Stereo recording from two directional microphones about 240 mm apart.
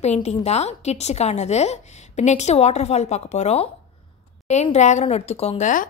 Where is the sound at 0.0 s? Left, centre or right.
Left.